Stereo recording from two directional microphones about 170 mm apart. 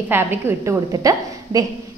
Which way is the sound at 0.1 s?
15° right (ahead or behind).